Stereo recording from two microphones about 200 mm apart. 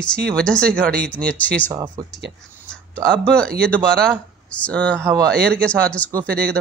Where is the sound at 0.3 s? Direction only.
5° left (ahead or behind).